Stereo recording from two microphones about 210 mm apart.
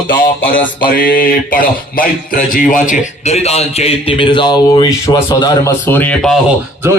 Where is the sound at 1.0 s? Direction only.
40° left (ahead or behind); by 6.4 s 5° left (ahead or behind).